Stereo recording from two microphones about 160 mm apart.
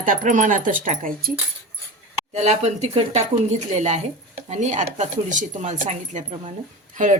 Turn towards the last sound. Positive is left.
turn(degrees=-50)  # may be behind; listen again after turning